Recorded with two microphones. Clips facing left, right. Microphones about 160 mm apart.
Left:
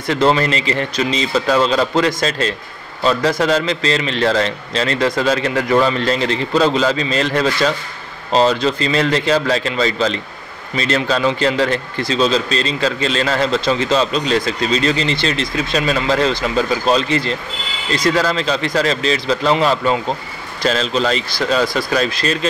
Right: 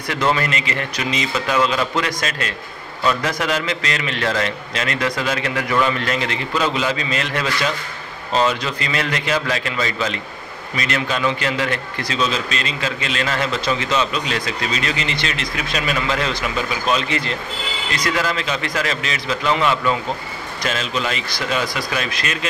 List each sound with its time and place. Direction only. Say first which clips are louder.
0.1 s a man's voice: left 5 dB; 30° left (ahead or behind)